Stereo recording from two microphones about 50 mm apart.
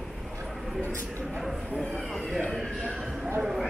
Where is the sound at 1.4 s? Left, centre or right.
Centre.